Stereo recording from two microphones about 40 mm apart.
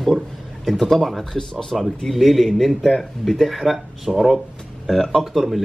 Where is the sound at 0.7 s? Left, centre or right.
Centre.